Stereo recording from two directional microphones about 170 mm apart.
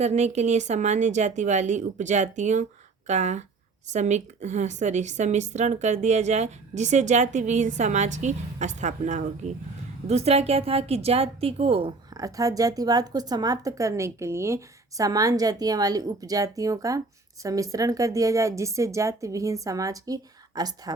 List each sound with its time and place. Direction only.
0.0 s a woman's voice: 40° right (ahead or behind); by 20.9 s 25° right (ahead or behind)